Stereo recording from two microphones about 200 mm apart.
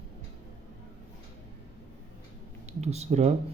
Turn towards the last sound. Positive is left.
turn(degrees=-35)  # may be behind; listen again after turning